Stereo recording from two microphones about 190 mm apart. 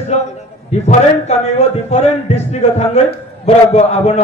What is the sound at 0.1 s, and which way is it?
A man's voice, 35° left (ahead or behind).